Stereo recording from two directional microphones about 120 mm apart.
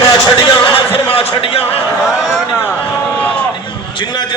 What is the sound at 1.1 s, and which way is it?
Speech, 50° left (ahead or behind).